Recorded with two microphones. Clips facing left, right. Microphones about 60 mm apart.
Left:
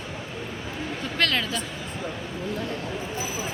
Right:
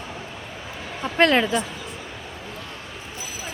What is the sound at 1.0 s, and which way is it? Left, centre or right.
Speech, right.